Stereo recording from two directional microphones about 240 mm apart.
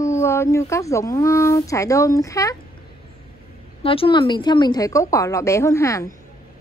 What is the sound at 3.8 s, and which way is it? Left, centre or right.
A woman's voice, left.